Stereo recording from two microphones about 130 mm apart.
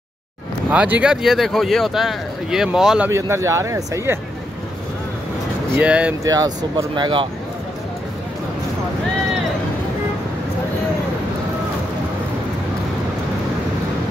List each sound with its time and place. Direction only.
0.7 s speech: 10° right (ahead or behind)
3.1 s speech: 20° right (ahead or behind)
5.8 s speech: 10° right (ahead or behind)
6.2 s speech: 25° right (ahead or behind)